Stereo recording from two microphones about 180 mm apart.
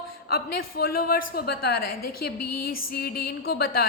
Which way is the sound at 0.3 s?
60° left (ahead or behind).